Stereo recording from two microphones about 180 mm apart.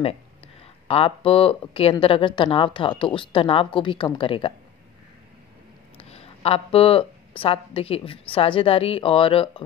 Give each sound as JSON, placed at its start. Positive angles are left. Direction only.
{"t": 0.8, "sound": "speech", "side_deg": 30}
{"t": 6.0, "sound": "a woman's voice", "side_deg": 35}